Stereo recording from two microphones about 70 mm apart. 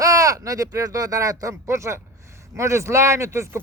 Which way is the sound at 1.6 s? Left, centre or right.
Right.